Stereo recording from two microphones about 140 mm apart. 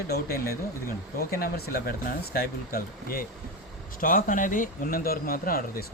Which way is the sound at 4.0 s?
75° left (ahead or behind).